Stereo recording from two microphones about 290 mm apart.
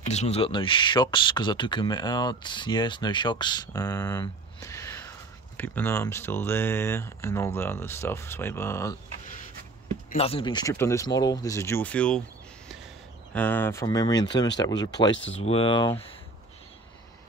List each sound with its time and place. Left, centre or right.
0.1 s speech: left
10.1 s speech: centre
13.3 s speech: centre